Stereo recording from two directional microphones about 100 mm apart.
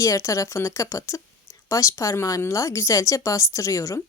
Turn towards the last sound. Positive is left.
turn(degrees=30)  # may be behind; listen again after turning